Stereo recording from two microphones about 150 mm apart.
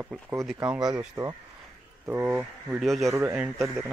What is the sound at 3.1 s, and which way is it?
Speech, 15° right (ahead or behind).